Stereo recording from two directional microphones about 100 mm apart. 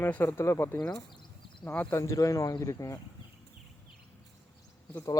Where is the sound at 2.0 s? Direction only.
30° left (ahead or behind).